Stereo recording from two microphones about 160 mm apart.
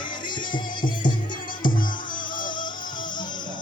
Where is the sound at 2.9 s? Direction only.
30° left (ahead or behind).